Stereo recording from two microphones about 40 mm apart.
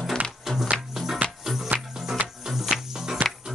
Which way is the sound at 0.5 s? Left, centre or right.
Centre.